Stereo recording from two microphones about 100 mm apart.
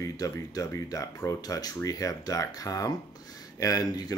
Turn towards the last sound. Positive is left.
turn(degrees=40)  # may be behind; listen again after turning